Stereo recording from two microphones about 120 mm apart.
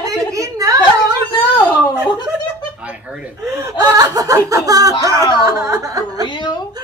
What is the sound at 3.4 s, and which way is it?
Laughter, 25° right (ahead or behind).